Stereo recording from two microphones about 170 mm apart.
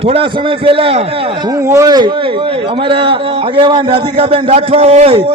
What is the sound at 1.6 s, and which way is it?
A man's voice, 20° right (ahead or behind).